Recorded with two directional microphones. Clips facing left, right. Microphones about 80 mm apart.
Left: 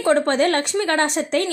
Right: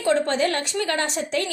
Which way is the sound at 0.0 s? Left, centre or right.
Left.